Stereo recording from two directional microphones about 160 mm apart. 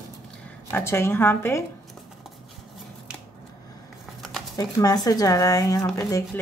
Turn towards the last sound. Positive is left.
turn(degrees=20)  # may be behind; listen again after turning